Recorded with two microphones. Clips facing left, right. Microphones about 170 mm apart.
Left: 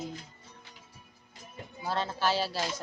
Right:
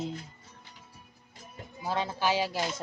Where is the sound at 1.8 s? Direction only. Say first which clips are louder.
Right 1 dB; 15° right (ahead or behind).